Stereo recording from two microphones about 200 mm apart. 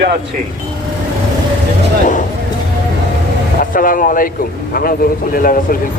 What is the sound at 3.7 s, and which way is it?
A man's voice, 45° left (ahead or behind).